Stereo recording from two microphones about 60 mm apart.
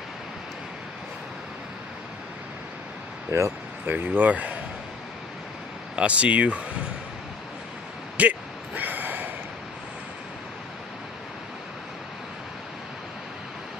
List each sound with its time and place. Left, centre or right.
3.3 s speech: right
3.8 s speech: right
5.9 s speech: right
8.2 s a sound: right